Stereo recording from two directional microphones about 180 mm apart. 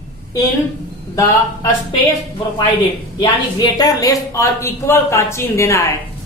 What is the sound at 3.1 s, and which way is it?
Speech, 20° left (ahead or behind).